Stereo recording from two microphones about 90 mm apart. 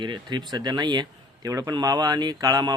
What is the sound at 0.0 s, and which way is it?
Speech, 60° right (ahead or behind).